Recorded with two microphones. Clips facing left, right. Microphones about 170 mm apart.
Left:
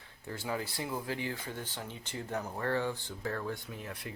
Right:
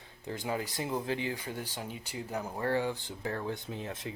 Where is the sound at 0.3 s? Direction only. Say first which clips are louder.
Right 2 dB; 20° right (ahead or behind).